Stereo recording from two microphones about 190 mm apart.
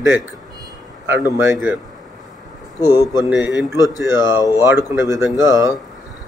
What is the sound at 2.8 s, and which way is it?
Speech, 20° left (ahead or behind).